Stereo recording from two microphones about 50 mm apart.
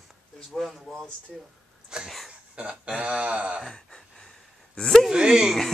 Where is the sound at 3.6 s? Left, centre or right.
Centre.